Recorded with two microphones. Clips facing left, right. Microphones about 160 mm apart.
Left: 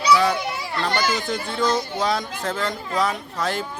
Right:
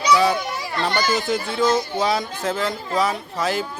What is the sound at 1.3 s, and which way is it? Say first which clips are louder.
Speech: right 3 dB; 5° right (ahead or behind).